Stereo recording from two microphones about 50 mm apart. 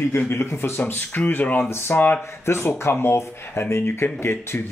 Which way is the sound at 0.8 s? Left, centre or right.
Left.